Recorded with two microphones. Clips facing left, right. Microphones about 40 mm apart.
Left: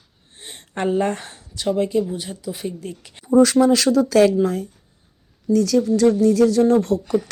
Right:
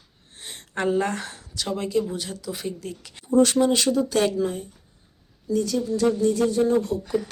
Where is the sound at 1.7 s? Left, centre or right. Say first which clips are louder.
Left 5 dB; centre.